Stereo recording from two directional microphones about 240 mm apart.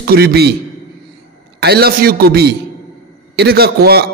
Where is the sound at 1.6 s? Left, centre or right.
Right.